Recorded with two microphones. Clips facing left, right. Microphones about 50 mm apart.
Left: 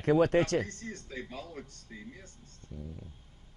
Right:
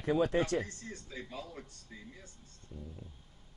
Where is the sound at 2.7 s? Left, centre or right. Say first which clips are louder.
Left 3 dB; left.